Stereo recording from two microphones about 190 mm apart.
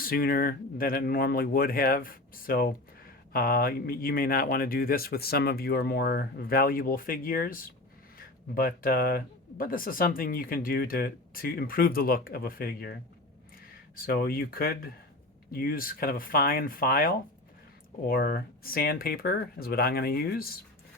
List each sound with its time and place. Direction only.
0.0 s speech: 50° left (ahead or behind)